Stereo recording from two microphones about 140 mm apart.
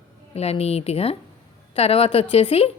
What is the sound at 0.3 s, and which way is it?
Speech, 45° left (ahead or behind).